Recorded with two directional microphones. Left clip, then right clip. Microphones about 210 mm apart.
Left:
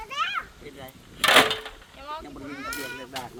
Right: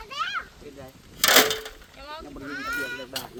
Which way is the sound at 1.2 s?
60° right (ahead or behind).